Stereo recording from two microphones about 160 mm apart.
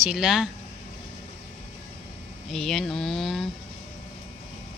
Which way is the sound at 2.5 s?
Centre (ahead or behind).